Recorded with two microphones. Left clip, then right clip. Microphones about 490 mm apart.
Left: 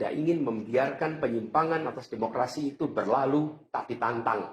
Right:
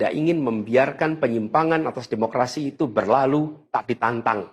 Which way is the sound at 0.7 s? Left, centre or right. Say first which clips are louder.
Right 8 dB; right.